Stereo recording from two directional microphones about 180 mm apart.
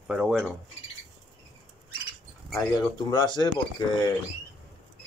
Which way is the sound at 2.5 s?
20° left (ahead or behind).